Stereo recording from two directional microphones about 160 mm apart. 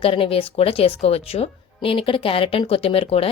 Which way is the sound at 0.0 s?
35° left (ahead or behind).